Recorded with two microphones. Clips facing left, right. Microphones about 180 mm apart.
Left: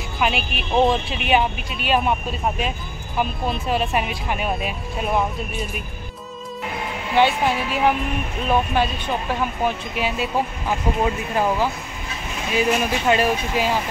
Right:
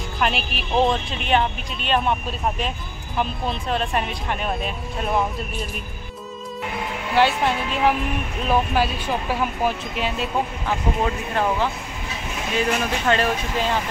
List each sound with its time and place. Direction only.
0.2 s speech: centre (ahead or behind)
3.2 s speech: 5° left (ahead or behind)
7.2 s speech: centre (ahead or behind)